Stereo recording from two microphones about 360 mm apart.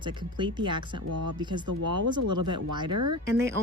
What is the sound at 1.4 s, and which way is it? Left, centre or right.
Speech, centre.